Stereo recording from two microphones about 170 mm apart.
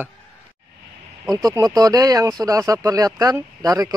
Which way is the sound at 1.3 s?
20° right (ahead or behind).